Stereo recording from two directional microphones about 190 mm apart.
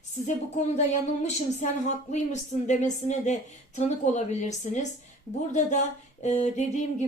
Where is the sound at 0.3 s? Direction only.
35° left (ahead or behind).